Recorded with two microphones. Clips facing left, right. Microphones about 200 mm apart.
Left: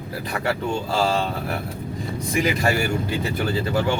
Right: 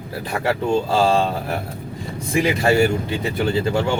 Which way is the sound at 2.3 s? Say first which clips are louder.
Right 5 dB; 25° right (ahead or behind).